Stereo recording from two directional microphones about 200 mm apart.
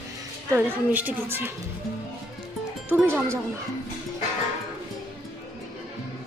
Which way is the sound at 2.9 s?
5° right (ahead or behind).